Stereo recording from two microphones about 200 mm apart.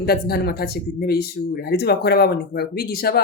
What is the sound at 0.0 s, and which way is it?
Speech, 50° left (ahead or behind).